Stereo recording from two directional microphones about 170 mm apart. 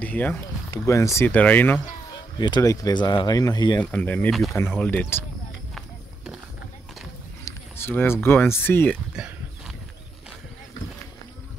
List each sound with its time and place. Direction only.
0.0 s speech: 10° left (ahead or behind)
2.3 s speech: 25° left (ahead or behind)
3.8 s speech: 10° left (ahead or behind)
4.6 s speech: 10° left (ahead or behind)
5.8 s a sound: 5° right (ahead or behind)
7.4 s speech: 15° left (ahead or behind)
9.1 s a sound: 5° right (ahead or behind)